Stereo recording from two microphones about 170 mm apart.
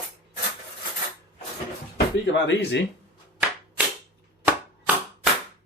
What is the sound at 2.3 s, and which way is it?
Speech, 85° left.